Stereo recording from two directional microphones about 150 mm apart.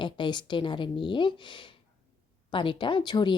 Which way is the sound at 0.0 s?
30° left (ahead or behind).